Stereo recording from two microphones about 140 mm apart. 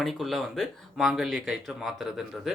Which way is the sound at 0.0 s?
Centre (ahead or behind).